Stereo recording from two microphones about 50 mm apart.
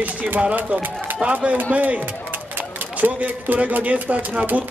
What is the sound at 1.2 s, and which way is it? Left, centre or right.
A man's voice, right.